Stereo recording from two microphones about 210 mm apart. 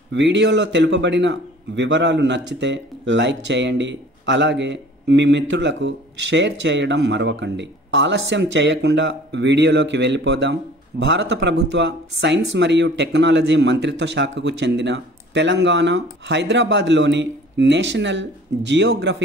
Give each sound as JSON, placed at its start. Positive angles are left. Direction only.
{"t": 0.1, "sound": "a man's voice", "side_deg": -60}